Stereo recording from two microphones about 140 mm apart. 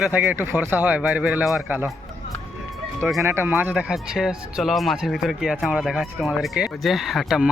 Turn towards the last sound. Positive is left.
turn(degrees=-5)  # may be behind; listen again after turning